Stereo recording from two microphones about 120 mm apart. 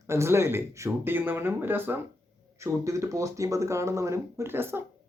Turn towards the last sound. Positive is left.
turn(degrees=-20)  # may be behind; listen again after turning